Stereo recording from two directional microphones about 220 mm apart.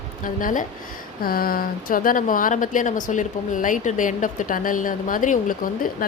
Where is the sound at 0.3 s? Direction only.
40° left (ahead or behind).